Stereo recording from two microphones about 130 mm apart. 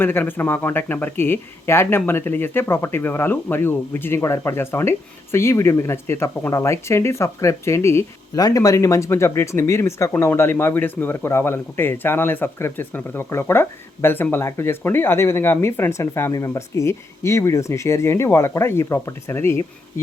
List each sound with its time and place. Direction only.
0.0 s speech: 15° left (ahead or behind)